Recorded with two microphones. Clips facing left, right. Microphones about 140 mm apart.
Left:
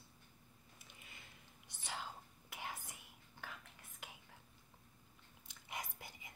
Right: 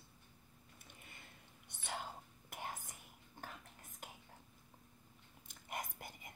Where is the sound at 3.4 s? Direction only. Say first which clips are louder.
Right 1 dB; 45° right (ahead or behind).